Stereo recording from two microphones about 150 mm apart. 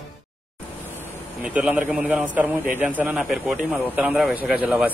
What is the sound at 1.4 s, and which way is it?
A man's voice, 10° right (ahead or behind).